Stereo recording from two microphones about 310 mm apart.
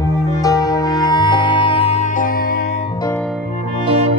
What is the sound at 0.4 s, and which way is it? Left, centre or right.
Music, centre.